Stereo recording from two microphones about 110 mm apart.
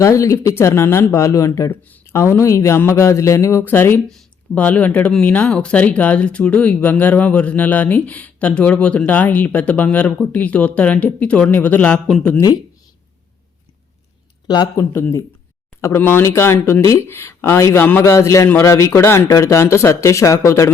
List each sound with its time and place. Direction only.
0.0 s speech: 30° left (ahead or behind); by 12.1 s 10° left (ahead or behind)
14.4 s speech: 40° left (ahead or behind)
15.8 s speech: 20° left (ahead or behind)